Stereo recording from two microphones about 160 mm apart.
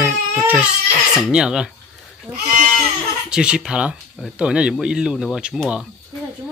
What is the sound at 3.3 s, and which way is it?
Speech, 5° right (ahead or behind).